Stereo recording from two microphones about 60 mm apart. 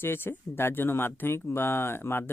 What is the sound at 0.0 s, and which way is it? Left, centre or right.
Speech, left.